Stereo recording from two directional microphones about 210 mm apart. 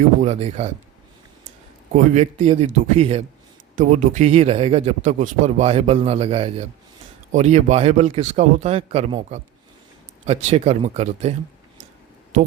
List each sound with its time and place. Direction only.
0.2 s a man's voice: 30° right (ahead or behind)
1.9 s a man's voice: 35° right (ahead or behind)